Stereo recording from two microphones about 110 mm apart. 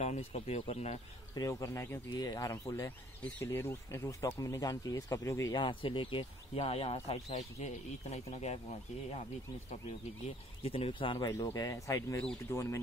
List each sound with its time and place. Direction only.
0.0 s speech: 85° left
1.3 s speech: 30° left (ahead or behind)
5.6 s speech: 50° left (ahead or behind)
6.6 s speech: 70° left (ahead or behind)
10.6 s speech: 60° left (ahead or behind)
11.2 s speech: 30° left (ahead or behind)